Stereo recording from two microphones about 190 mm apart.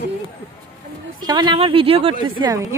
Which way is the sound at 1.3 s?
25° right (ahead or behind).